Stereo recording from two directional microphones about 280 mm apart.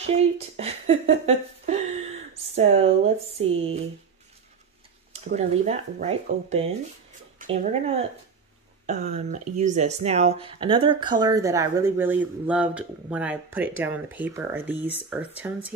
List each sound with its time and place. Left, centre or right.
0.0 s a sound: right
3.4 s speech: right
5.1 s speech: right; by 15.7 s centre